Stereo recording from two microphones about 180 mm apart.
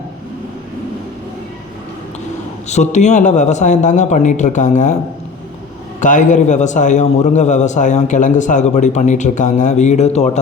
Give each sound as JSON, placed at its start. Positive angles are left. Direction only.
{"t": 2.6, "sound": "a man's voice", "side_deg": 40}
{"t": 6.0, "sound": "a man's voice", "side_deg": 45}